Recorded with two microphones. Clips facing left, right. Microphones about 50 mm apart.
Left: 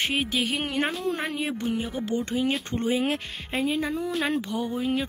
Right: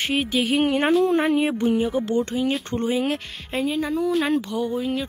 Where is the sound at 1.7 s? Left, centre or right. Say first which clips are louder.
Right 8 dB; centre.